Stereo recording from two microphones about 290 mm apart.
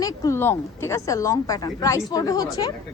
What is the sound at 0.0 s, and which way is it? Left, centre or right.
Speech, centre.